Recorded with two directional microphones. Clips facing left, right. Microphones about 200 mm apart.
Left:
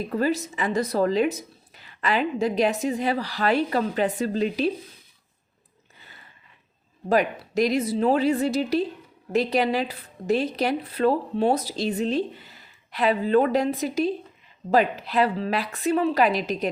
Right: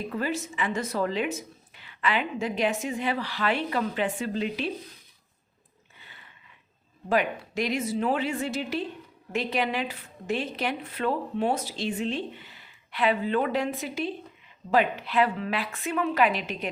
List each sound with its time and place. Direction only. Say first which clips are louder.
0.1 s speech: left 6 dB; 40° left (ahead or behind)
6.0 s a sound: left 2 dB; 40° left (ahead or behind)
7.1 s speech: left 4 dB; 40° left (ahead or behind)